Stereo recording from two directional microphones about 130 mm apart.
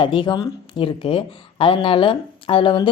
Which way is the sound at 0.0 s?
40° left (ahead or behind).